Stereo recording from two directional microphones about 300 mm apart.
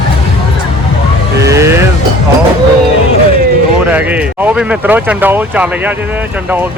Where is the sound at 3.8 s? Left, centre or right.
Centre.